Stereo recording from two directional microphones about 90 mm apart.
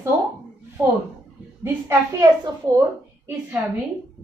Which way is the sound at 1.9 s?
45° right (ahead or behind).